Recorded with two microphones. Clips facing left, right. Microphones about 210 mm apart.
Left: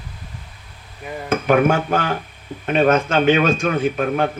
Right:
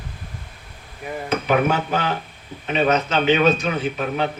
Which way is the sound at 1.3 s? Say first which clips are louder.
Left 4 dB; 50° left (ahead or behind).